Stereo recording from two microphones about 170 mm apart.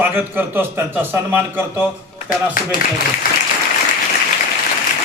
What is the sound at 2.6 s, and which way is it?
Speech, 55° left (ahead or behind).